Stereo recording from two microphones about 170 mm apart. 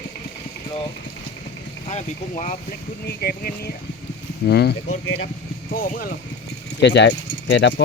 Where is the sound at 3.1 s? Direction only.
65° left (ahead or behind).